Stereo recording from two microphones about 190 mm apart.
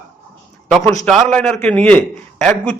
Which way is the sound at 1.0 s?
5° left (ahead or behind).